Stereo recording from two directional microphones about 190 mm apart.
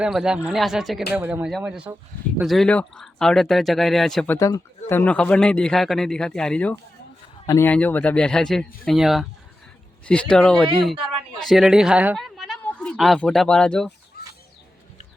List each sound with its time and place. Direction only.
0.0 s a man's voice: 5° right (ahead or behind)
4.4 s a man's voice: 15° left (ahead or behind)